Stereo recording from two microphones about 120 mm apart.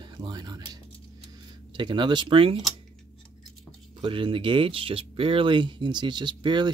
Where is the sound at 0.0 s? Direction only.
35° right (ahead or behind).